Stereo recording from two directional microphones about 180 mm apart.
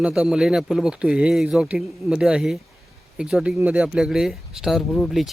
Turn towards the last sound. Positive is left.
turn(degrees=0)  # may be behind; listen again after turning